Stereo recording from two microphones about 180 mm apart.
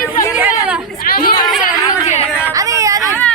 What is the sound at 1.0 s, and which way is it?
Speech, 55° left (ahead or behind).